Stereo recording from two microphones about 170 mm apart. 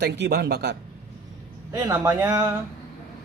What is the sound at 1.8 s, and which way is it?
Speech, 20° right (ahead or behind).